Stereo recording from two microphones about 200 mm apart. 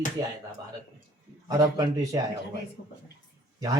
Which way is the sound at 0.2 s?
15° right (ahead or behind).